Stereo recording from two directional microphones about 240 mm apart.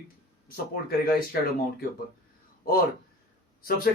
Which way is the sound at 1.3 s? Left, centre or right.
Left.